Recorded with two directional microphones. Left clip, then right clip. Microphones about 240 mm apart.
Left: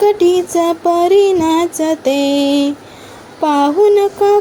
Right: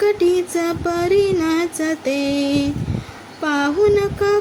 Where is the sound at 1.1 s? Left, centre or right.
Centre.